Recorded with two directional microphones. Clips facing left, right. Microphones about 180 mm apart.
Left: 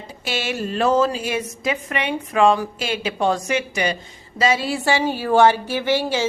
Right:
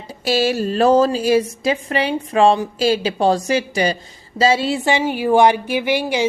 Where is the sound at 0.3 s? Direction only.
35° right (ahead or behind).